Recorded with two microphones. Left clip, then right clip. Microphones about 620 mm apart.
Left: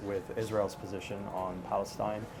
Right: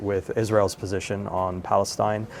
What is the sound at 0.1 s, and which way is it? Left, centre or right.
A man's voice, right.